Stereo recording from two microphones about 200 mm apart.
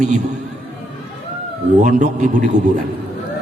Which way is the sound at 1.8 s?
40° right (ahead or behind).